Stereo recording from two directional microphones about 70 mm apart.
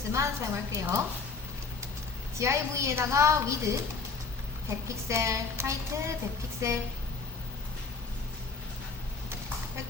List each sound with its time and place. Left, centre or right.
0.1 s a woman's voice: right
2.4 s a woman's voice: right